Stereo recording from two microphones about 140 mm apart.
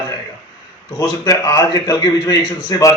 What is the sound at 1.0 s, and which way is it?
A man's voice, 25° left (ahead or behind).